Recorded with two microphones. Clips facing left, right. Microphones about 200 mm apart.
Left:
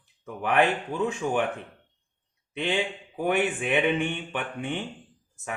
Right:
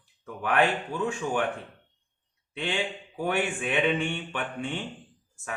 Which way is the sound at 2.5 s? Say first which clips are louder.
Left 3 dB; 20° left (ahead or behind).